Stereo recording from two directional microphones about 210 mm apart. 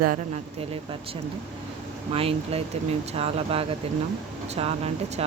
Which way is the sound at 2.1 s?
25° right (ahead or behind).